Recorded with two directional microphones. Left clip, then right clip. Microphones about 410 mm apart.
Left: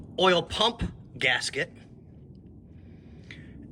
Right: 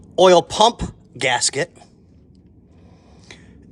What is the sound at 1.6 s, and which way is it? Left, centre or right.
Speech, right.